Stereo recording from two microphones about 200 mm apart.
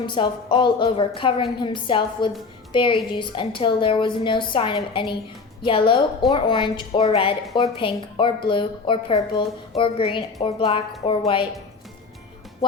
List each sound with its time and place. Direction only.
0.0 s a woman's voice: 25° left (ahead or behind)